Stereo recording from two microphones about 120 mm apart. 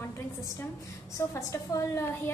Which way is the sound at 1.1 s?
25° left (ahead or behind).